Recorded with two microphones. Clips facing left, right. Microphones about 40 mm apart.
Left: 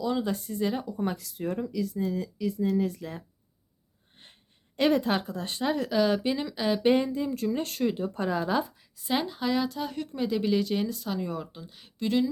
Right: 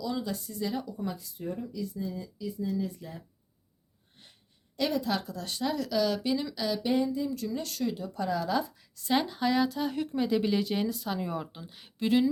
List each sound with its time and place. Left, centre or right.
0.0 s speech: left
0.9 s speech: left
1.1 s speech: left
4.1 s wheeze: left
4.8 s speech: left
6.8 s speech: left
8.8 s a woman's voice: centre